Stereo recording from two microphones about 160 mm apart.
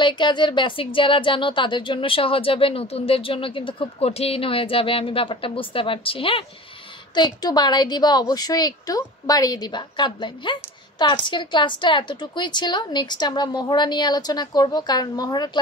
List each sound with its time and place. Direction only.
0.0 s a woman's voice: 30° left (ahead or behind)